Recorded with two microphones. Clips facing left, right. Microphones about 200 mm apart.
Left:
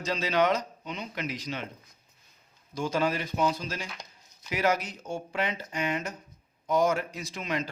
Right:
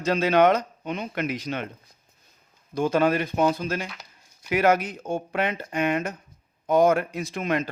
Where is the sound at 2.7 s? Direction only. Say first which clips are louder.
Right 7 dB; 55° right (ahead or behind).